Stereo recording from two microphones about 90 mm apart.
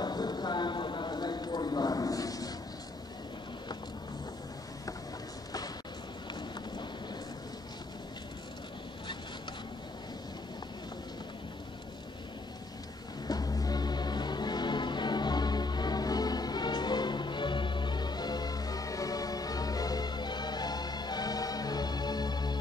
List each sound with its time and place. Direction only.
0.0 s clip-clop: 50° left (ahead or behind)
13.3 s choir: 45° left (ahead or behind)